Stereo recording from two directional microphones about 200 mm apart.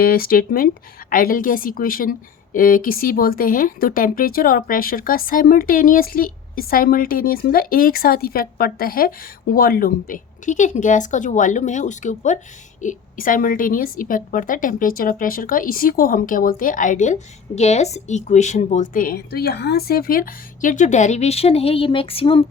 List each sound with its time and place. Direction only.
0.0 s a woman's voice: 50° left (ahead or behind); by 22.4 s 30° left (ahead or behind)